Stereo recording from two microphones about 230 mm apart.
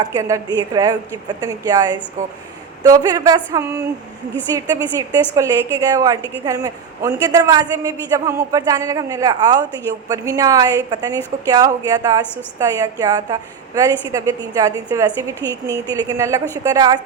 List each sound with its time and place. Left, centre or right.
0.0 s a woman's voice: centre